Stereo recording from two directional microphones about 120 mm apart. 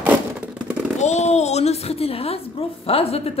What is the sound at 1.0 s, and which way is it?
A woman's voice, 70° left (ahead or behind).